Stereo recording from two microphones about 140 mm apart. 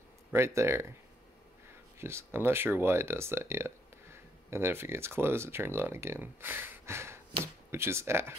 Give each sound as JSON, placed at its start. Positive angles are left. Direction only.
{"t": 0.3, "sound": "speech", "side_deg": -20}
{"t": 2.0, "sound": "speech", "side_deg": -20}